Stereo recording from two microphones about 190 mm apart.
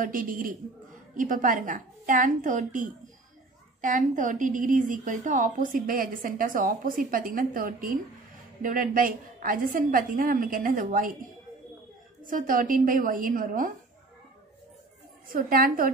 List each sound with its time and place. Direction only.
0.0 s a woman's voice: 45° right (ahead or behind)
12.3 s a woman's voice: 45° right (ahead or behind)
15.2 s a woman's voice: 50° right (ahead or behind)